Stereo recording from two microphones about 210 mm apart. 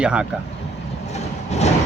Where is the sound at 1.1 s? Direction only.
30° left (ahead or behind).